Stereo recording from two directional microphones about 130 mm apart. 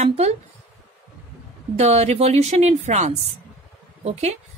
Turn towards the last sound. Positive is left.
turn(degrees=-55)  # may be behind; listen again after turning